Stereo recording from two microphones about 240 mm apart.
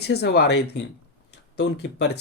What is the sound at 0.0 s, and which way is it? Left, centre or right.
Speech, left.